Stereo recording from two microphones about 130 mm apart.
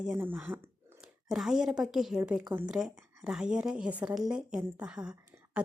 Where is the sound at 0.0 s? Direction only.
15° right (ahead or behind).